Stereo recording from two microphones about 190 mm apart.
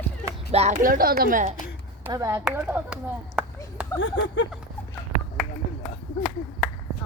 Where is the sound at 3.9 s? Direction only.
85° left.